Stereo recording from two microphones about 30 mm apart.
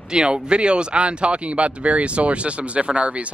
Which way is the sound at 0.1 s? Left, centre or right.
Right.